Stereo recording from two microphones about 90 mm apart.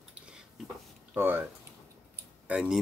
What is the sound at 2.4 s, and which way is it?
Speech, 10° right (ahead or behind).